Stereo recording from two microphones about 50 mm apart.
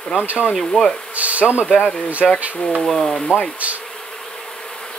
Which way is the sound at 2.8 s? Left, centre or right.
Centre.